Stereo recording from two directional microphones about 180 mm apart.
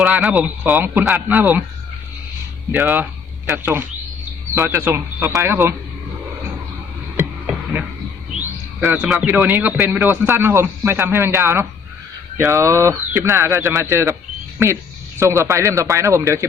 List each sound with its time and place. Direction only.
0.0 s speech: 5° right (ahead or behind)
2.7 s speech: 10° right (ahead or behind)
7.2 s a sound: 10° right (ahead or behind)
8.8 s speech: 10° right (ahead or behind)
15.2 s speech: 15° right (ahead or behind)